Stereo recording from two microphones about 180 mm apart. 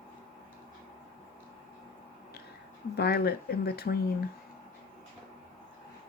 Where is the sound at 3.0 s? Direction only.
65° left (ahead or behind).